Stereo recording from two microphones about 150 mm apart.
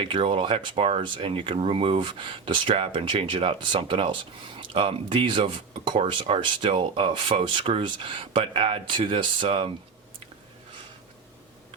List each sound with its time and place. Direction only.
0.0 s speech: 35° right (ahead or behind)